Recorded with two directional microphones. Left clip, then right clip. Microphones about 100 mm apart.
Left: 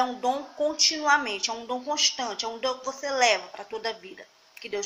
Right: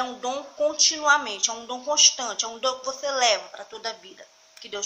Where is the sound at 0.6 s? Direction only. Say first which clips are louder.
Right 5 dB; 15° right (ahead or behind).